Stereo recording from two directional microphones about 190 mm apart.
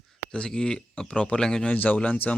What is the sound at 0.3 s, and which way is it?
Speech, 5° left (ahead or behind).